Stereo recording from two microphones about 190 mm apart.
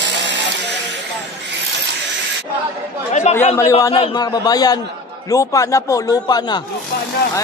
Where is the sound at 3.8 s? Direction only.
25° left (ahead or behind).